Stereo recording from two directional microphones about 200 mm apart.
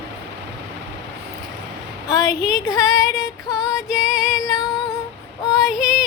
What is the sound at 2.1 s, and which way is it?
Female singing, 15° left (ahead or behind).